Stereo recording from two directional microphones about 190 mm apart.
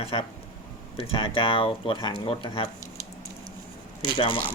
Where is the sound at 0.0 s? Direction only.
30° left (ahead or behind).